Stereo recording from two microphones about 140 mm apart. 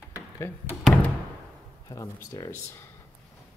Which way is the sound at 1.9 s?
25° left (ahead or behind).